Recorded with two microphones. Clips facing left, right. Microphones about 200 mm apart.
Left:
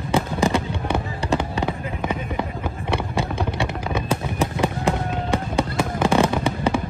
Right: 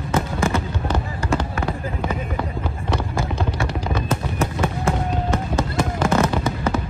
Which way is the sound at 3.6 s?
15° left (ahead or behind).